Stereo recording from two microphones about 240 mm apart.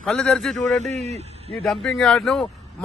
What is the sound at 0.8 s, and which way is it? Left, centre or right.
Speech, right.